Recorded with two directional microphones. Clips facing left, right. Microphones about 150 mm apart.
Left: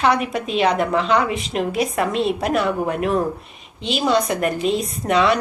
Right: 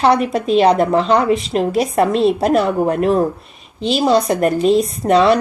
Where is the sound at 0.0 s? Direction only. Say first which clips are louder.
Right 5 dB; 35° right (ahead or behind).